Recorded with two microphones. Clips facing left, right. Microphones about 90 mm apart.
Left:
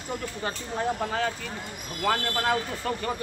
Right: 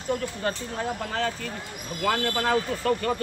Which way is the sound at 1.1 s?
10° left (ahead or behind).